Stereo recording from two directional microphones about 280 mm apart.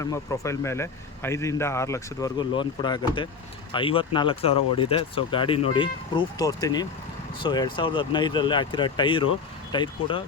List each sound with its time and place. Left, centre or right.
0.0 s speech: centre